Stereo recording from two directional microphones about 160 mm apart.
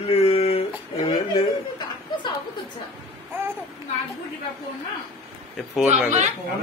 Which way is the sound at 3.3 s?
15° right (ahead or behind).